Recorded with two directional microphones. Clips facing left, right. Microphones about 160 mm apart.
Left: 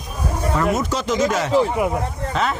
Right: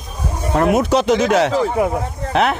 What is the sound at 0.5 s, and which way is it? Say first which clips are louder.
Speech: right 8 dB; 65° right (ahead or behind).